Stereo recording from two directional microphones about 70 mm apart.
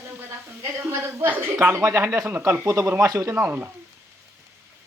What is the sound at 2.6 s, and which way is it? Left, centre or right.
Speech, right.